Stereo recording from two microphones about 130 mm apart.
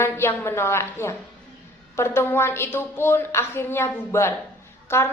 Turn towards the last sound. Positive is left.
turn(degrees=20)  # may be behind; listen again after turning